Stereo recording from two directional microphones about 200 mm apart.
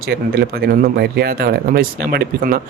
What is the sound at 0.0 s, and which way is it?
Speech, 50° right (ahead or behind).